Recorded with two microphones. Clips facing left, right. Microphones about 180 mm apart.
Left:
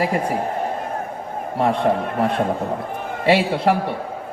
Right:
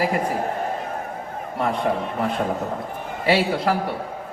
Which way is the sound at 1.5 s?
30° left (ahead or behind).